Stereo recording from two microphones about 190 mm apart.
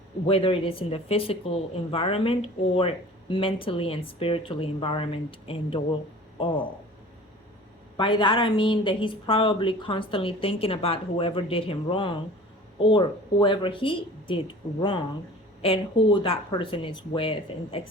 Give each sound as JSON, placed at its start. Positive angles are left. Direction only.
{"t": 0.3, "sound": "a woman's voice", "side_deg": 30}
{"t": 7.9, "sound": "a woman's voice", "side_deg": 25}